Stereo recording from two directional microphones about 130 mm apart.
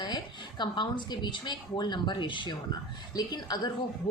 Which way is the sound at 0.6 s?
35° left (ahead or behind).